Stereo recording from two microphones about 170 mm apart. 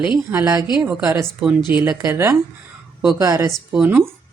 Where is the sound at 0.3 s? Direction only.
15° right (ahead or behind).